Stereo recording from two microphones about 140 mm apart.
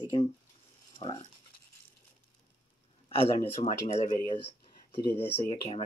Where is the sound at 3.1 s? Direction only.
45° left (ahead or behind).